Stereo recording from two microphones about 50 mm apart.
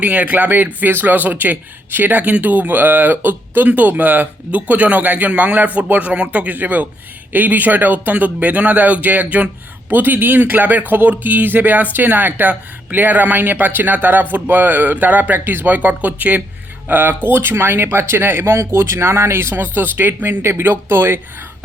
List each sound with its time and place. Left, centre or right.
0.0 s speech: right
16.9 s speech: right